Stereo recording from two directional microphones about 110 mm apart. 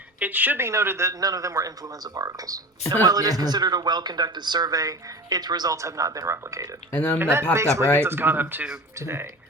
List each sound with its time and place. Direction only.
0.2 s a man's voice: 15° right (ahead or behind)
6.9 s speech: 20° left (ahead or behind)
7.2 s a man's voice: 25° right (ahead or behind)